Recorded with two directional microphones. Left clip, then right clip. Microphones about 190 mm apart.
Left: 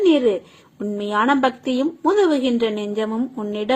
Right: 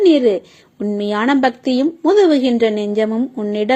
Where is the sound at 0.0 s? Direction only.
30° right (ahead or behind).